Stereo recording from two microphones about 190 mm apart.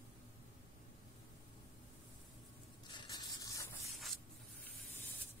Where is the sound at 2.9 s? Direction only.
25° left (ahead or behind).